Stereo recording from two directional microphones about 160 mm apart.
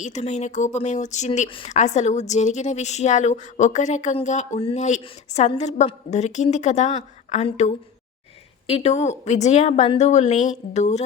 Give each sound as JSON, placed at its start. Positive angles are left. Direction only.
{"t": 0.0, "sound": "a woman's voice", "side_deg": 45}
{"t": 1.5, "sound": "speech", "side_deg": 30}
{"t": 1.7, "sound": "a woman's voice", "side_deg": 45}